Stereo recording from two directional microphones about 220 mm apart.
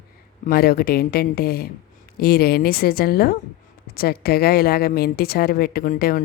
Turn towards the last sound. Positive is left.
turn(degrees=40)  # may be behind; listen again after turning